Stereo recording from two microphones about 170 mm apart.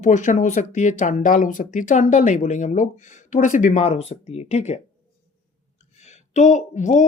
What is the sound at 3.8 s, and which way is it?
Speech, 35° left (ahead or behind).